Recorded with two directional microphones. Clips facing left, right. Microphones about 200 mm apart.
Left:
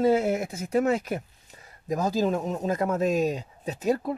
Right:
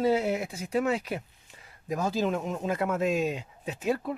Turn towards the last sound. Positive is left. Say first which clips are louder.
# left 3 dB
turn(degrees=40)  # may be behind; listen again after turning